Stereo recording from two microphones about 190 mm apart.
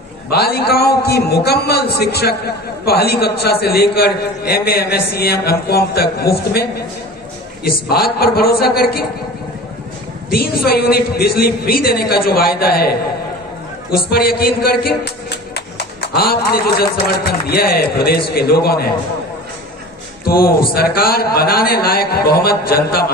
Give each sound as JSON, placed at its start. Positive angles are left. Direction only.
{"t": 0.3, "sound": "a man's voice", "side_deg": 55}
{"t": 10.3, "sound": "a man's voice", "side_deg": 55}
{"t": 15.5, "sound": "music", "side_deg": 60}
{"t": 16.9, "sound": "a man's voice", "side_deg": 55}
{"t": 20.2, "sound": "a man's voice", "side_deg": 50}